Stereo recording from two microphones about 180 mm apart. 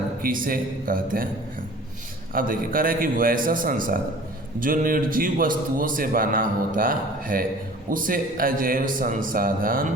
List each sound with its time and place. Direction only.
0.2 s a man's voice: 50° right (ahead or behind)
2.3 s a man's voice: 50° right (ahead or behind)